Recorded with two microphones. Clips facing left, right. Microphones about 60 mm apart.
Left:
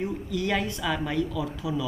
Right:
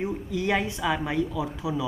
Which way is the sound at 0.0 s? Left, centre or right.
Centre.